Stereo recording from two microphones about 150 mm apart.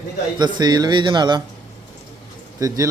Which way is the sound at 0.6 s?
30° right (ahead or behind).